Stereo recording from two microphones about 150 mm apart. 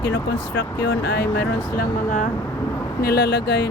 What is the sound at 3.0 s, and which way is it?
Speech, 90° left.